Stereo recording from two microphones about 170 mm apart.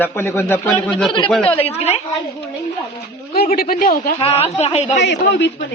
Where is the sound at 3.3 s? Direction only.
60° left (ahead or behind).